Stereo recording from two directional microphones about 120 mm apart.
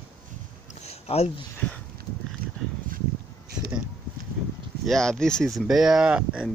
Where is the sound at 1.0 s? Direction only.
60° left (ahead or behind).